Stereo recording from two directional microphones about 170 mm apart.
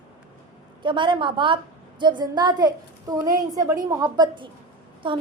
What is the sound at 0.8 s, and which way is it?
A woman's voice, 30° right (ahead or behind).